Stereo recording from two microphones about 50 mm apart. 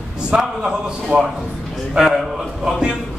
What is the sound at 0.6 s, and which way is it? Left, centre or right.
A man's voice, centre.